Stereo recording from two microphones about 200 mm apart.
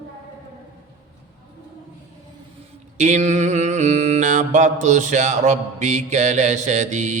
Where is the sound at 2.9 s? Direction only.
35° right (ahead or behind).